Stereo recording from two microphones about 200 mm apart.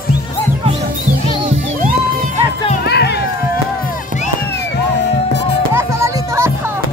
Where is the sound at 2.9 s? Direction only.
55° left (ahead or behind).